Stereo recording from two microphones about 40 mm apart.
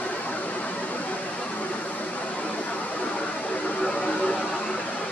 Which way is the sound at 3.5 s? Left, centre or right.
Left.